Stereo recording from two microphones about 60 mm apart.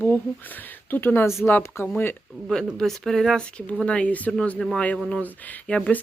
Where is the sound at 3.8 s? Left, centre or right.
Centre.